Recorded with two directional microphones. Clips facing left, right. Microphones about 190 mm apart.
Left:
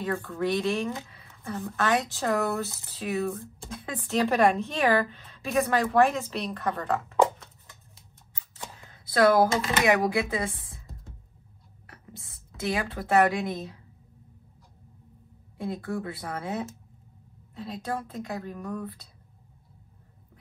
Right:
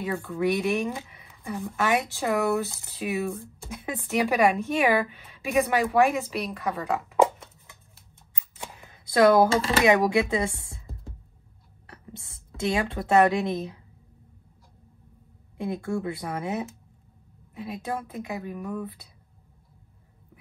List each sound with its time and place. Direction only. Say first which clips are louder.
0.0 s a woman's voice: right 2 dB; 15° right (ahead or behind)
6.3 s a woman's voice: right 1 dB; 5° right (ahead or behind)
6.9 s a sound: right 2 dB; 15° right (ahead or behind)
8.4 s shuffling cards: right 2 dB; 15° right (ahead or behind)
9.5 s speech: right 3 dB; 30° right (ahead or behind)
9.8 s speech: right 3 dB; 20° right (ahead or behind)
15.5 s a woman's voice: right 3 dB; 20° right (ahead or behind)